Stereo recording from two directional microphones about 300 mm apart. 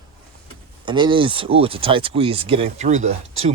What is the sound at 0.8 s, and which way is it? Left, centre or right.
Speech, centre.